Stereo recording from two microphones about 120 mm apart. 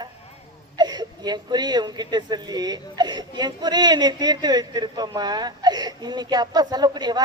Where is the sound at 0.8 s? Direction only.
35° right (ahead or behind).